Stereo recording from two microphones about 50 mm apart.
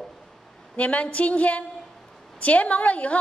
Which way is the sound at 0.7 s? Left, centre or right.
Left.